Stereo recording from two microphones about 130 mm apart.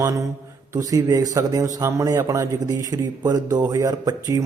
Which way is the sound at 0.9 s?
25° right (ahead or behind).